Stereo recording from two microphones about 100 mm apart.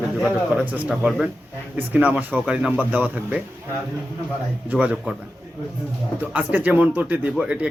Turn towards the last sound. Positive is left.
turn(degrees=-10)  # may be behind; listen again after turning